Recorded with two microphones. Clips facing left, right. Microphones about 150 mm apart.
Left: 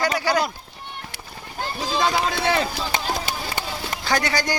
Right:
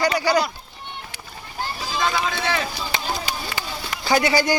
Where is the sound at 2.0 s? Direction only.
35° left (ahead or behind).